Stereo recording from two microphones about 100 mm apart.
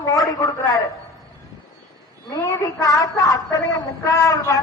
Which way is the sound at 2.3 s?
35° left (ahead or behind).